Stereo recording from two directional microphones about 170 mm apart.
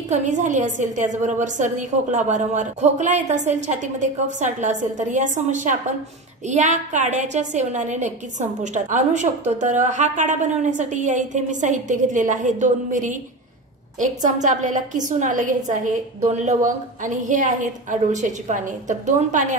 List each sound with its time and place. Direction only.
0.1 s a woman's voice: 45° right (ahead or behind)